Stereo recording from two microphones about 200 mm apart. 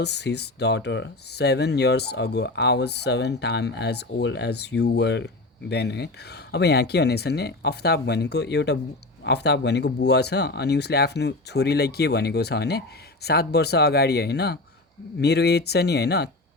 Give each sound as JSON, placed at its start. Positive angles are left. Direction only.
{"t": 0.0, "sound": "speech", "side_deg": 55}